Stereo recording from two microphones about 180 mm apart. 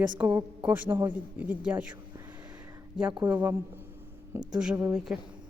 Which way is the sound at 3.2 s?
10° right (ahead or behind).